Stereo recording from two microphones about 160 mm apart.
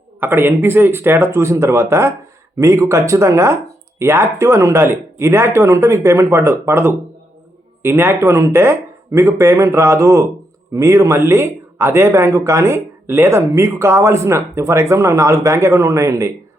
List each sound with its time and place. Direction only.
0.2 s speech: 15° right (ahead or behind)